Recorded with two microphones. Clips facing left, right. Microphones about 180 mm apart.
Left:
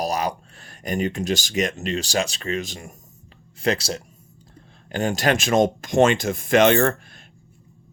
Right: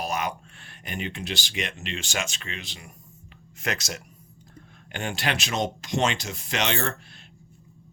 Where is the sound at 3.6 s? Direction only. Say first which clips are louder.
Left 8 dB; 30° left (ahead or behind); by 6.9 s 50° left (ahead or behind).